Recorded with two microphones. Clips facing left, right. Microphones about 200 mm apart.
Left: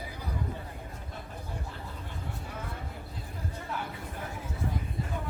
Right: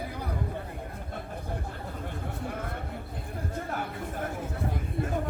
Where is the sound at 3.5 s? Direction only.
50° right (ahead or behind).